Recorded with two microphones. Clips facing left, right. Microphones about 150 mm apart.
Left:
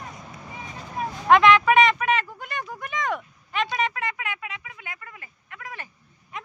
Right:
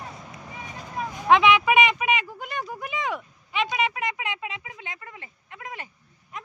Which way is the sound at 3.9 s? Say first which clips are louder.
Right 1 dB; 15° right (ahead or behind).